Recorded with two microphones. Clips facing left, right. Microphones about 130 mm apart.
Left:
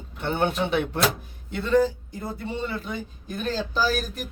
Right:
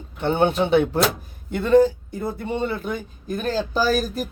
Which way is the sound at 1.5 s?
50° right (ahead or behind).